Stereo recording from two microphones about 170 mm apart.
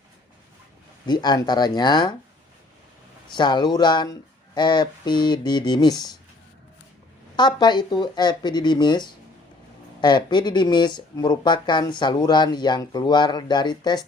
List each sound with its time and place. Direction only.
1.0 s speech: 25° left (ahead or behind)
3.3 s speech: 25° left (ahead or behind)
7.3 s speech: 25° left (ahead or behind)